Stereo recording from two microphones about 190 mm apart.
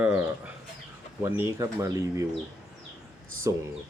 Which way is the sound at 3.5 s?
15° right (ahead or behind).